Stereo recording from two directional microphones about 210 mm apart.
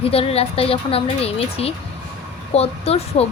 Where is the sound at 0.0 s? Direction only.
30° left (ahead or behind).